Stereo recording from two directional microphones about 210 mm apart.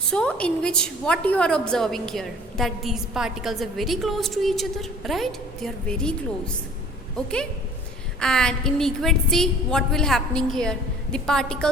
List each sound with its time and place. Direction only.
0.1 s a woman's voice: 5° left (ahead or behind)
8.2 s a woman's voice: 5° left (ahead or behind)